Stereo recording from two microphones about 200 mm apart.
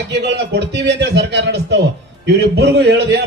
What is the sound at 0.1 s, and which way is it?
A man's voice, 60° right (ahead or behind).